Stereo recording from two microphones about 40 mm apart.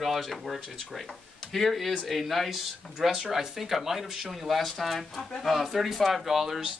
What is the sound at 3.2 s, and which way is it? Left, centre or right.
Speech, centre.